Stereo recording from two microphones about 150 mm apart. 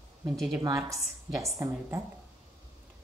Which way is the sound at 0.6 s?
25° right (ahead or behind).